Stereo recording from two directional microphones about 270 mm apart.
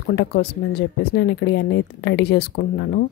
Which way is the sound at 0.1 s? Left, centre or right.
Left.